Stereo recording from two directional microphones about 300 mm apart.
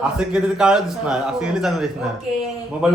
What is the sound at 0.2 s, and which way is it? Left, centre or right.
A man's voice, centre.